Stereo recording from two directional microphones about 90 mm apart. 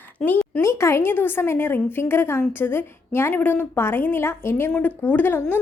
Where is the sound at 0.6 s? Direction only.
30° left (ahead or behind).